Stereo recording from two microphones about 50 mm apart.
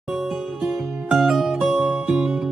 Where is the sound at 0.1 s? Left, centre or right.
Centre.